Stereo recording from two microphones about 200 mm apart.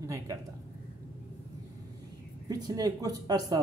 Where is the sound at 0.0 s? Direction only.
15° right (ahead or behind).